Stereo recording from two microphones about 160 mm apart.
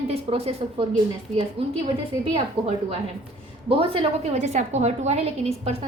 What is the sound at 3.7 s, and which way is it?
A woman's voice, 35° right (ahead or behind).